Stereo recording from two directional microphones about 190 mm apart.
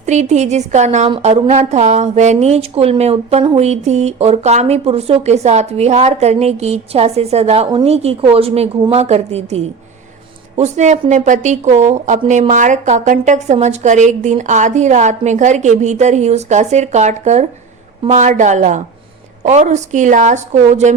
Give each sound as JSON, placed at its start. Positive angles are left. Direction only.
{"t": 0.0, "sound": "a woman's voice", "side_deg": -35}